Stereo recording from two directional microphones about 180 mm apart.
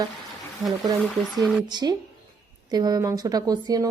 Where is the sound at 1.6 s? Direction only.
25° right (ahead or behind).